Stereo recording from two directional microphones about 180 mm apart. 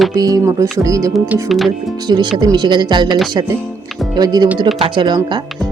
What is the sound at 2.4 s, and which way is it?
Speech, 25° right (ahead or behind).